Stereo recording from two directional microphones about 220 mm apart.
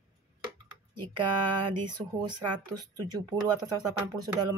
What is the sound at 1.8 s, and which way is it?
Speech, 20° right (ahead or behind).